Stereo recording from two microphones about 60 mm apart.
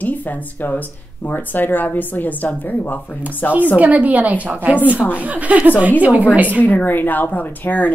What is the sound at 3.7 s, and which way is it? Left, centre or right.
A woman's voice, right.